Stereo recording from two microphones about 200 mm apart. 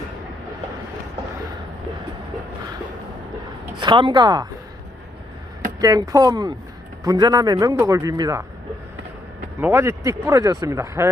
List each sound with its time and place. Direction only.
3.8 s a man's voice: 25° right (ahead or behind)
5.8 s a man's voice: 20° right (ahead or behind)
9.6 s speech: 10° right (ahead or behind)